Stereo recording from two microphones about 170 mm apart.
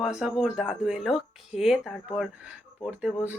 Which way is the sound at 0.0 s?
5° right (ahead or behind).